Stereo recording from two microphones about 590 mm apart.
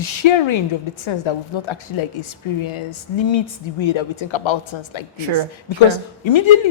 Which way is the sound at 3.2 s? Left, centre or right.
Left.